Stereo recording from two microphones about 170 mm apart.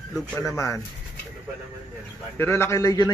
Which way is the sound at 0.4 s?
20° left (ahead or behind).